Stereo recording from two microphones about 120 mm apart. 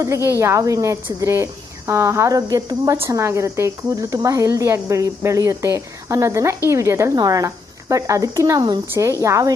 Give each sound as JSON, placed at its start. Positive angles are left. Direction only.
{"t": 0.0, "sound": "speech", "side_deg": -25}